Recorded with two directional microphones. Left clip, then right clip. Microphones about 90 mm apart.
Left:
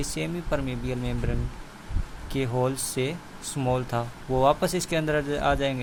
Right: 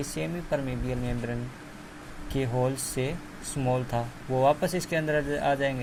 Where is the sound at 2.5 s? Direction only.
50° left (ahead or behind).